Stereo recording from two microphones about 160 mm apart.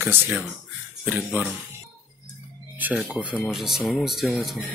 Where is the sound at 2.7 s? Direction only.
10° right (ahead or behind).